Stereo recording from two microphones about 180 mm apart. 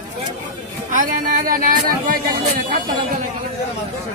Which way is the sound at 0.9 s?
50° right (ahead or behind).